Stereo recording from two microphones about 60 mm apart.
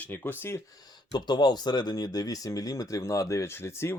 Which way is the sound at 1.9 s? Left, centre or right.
Left.